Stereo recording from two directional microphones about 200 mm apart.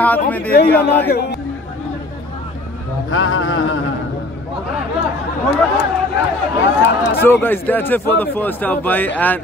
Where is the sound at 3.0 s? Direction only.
80° left.